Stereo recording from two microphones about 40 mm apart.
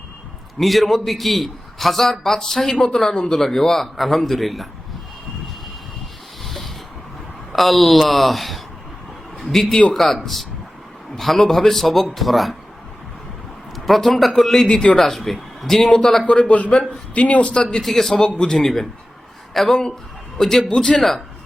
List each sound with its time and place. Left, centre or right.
0.6 s a man's voice: centre
2.7 s a man's voice: centre
6.4 s rub: centre
7.5 s a man's voice: centre
13.7 s a man's voice: centre
14.7 s a man's voice: centre
14.9 s a man's voice: centre
16.2 s a man's voice: left
16.5 s speech: left
17.6 s a man's voice: centre